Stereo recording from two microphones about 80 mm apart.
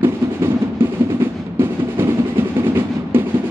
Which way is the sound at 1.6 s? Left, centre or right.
Right.